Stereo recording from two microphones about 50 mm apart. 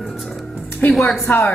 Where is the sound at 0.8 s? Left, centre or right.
Left.